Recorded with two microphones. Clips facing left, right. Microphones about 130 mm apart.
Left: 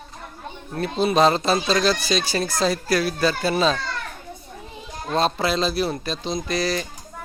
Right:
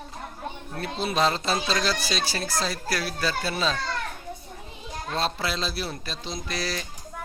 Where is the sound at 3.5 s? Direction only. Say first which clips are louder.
Left 8 dB; 90° left.